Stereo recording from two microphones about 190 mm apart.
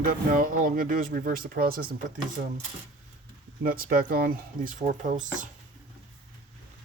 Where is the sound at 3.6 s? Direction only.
50° right (ahead or behind).